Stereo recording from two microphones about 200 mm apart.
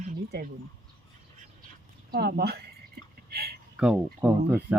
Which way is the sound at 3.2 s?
50° right (ahead or behind).